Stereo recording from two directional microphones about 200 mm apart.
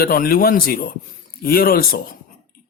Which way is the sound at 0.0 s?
45° left (ahead or behind).